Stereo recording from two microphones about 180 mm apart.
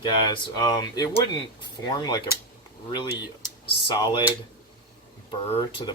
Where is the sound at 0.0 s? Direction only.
25° left (ahead or behind).